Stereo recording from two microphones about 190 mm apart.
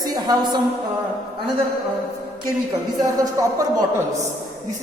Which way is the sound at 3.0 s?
20° right (ahead or behind).